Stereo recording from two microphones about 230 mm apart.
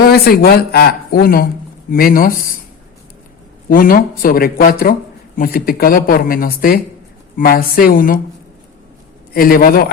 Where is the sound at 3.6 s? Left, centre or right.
Left.